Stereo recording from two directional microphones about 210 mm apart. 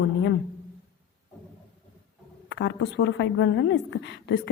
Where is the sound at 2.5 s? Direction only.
60° left (ahead or behind).